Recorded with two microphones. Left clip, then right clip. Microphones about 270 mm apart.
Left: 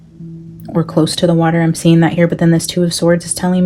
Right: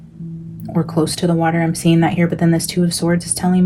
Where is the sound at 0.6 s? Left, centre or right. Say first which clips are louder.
Left 4 dB; left.